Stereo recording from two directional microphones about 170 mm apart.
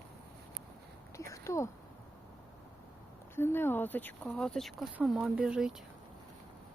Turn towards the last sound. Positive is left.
turn(degrees=-5)  # may be behind; listen again after turning